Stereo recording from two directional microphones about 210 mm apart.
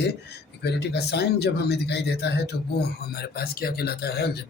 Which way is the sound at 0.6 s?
50° left (ahead or behind).